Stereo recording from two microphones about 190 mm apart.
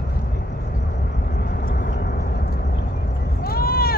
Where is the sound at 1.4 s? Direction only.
50° left (ahead or behind).